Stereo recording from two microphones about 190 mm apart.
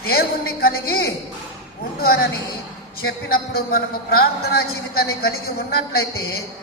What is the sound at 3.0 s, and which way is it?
A man's voice, 50° left (ahead or behind).